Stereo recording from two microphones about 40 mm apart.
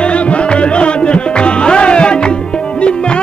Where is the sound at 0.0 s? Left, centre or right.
Left.